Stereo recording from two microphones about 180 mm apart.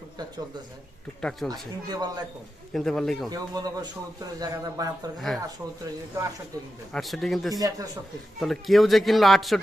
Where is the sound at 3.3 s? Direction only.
20° right (ahead or behind).